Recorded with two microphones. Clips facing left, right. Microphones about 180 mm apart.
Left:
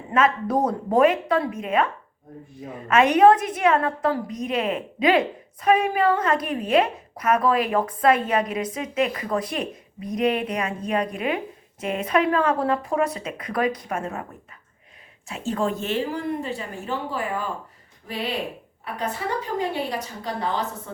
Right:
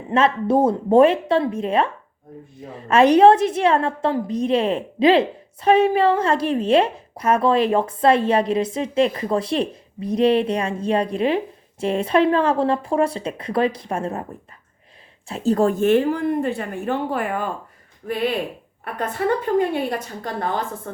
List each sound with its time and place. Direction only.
0.1 s a woman's voice: 30° right (ahead or behind)
15.3 s a woman's voice: 40° right (ahead or behind); by 17.5 s 55° right (ahead or behind)
18.9 s a woman's voice: 55° right (ahead or behind)